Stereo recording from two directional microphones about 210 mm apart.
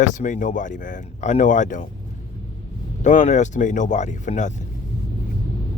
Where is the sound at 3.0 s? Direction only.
35° left (ahead or behind).